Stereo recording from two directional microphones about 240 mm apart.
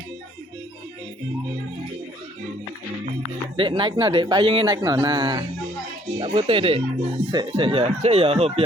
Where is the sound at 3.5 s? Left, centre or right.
Right.